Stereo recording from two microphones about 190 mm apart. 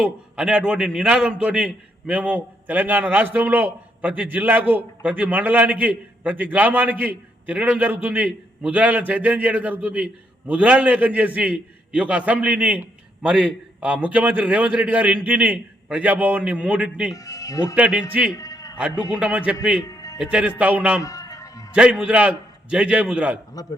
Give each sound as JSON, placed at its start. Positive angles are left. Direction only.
{"t": 0.0, "sound": "a man's voice", "side_deg": -5}
{"t": 17.2, "sound": "speech", "side_deg": 15}
{"t": 17.7, "sound": "a man's voice", "side_deg": -5}
{"t": 18.3, "sound": "a sound", "side_deg": 15}
{"t": 18.8, "sound": "a man's voice", "side_deg": -5}
{"t": 19.8, "sound": "music", "side_deg": 20}
{"t": 20.1, "sound": "a man's voice", "side_deg": -5}
{"t": 21.0, "sound": "music", "side_deg": 15}
{"t": 21.8, "sound": "a man's voice", "side_deg": -5}